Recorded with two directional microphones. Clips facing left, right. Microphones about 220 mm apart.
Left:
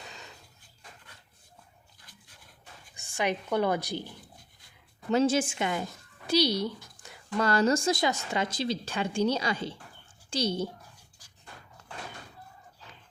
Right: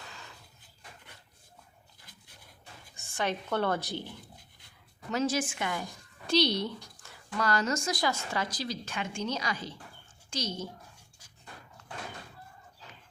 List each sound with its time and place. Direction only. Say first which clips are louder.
2.9 s a woman's voice: left 3 dB; 15° left (ahead or behind)
5.1 s a woman's voice: left 5 dB; 25° left (ahead or behind)
6.2 s speech: left 1 dB; 10° left (ahead or behind)
7.0 s a woman's voice: left 4 dB; 25° left (ahead or behind)